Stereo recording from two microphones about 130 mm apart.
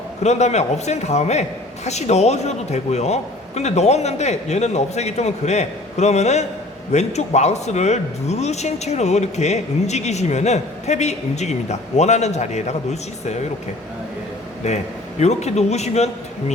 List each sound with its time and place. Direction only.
0.2 s speech: 60° left (ahead or behind)
14.6 s speech: 60° left (ahead or behind)